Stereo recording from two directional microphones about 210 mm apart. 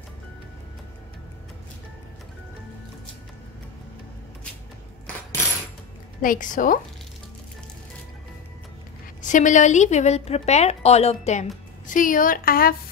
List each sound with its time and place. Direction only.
6.2 s a woman's voice: 40° left (ahead or behind)
9.2 s a woman's voice: 35° left (ahead or behind)